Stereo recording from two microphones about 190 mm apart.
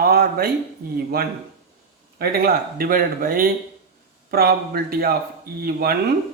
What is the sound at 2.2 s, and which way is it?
Speech, 55° right (ahead or behind).